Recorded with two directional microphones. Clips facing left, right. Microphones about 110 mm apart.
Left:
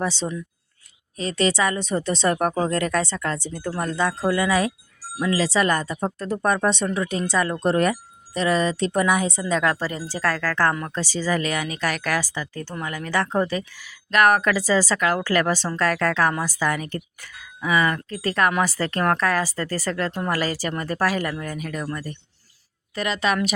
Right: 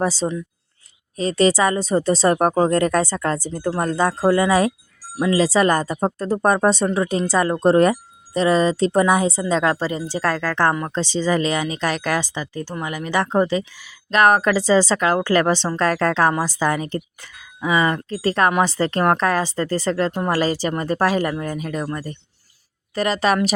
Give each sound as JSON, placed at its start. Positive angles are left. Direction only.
{"t": 0.0, "sound": "speech", "side_deg": -40}
{"t": 23.0, "sound": "speech", "side_deg": -35}